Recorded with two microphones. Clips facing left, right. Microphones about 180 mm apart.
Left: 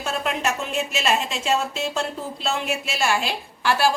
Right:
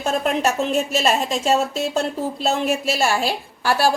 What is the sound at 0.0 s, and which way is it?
A woman's voice, 40° right (ahead or behind).